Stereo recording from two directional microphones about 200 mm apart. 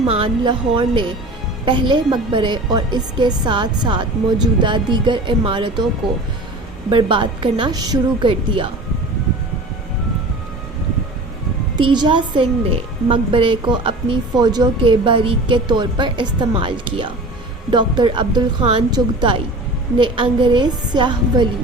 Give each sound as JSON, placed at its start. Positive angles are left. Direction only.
{"t": 0.1, "sound": "a woman's voice", "side_deg": -25}
{"t": 6.9, "sound": "a woman's voice", "side_deg": -25}
{"t": 11.8, "sound": "a woman's voice", "side_deg": -25}